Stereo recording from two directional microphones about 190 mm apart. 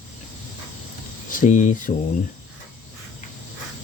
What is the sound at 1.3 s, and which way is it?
Speech, 40° left (ahead or behind).